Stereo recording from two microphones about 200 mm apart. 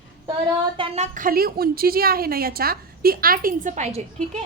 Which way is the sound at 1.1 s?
45° right (ahead or behind).